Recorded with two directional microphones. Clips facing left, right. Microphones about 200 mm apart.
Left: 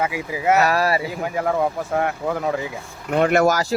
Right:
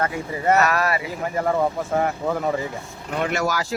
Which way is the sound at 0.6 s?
30° left (ahead or behind).